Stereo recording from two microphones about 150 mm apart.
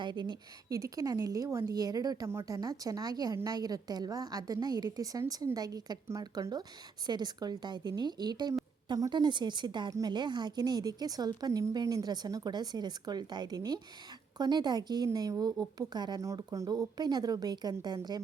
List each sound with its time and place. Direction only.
0.0 s a woman's voice: 30° right (ahead or behind)